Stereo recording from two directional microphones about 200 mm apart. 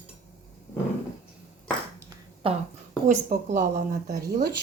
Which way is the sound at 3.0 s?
40° right (ahead or behind).